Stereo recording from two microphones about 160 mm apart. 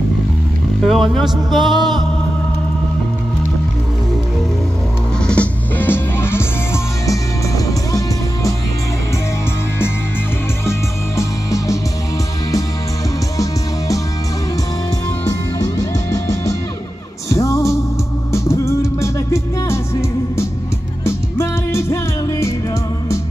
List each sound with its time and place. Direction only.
0.8 s speech: centre (ahead or behind)
5.2 s music: 10° left (ahead or behind)
10.7 s music: 20° left (ahead or behind)
13.4 s music: 20° left (ahead or behind)
15.8 s music: 20° left (ahead or behind)
21.0 s music: 15° left (ahead or behind)